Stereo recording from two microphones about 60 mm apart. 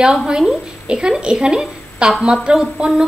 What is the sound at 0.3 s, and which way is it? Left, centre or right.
A woman's voice, centre.